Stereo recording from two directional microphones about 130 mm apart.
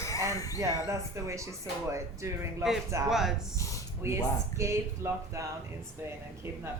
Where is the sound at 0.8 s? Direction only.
20° right (ahead or behind).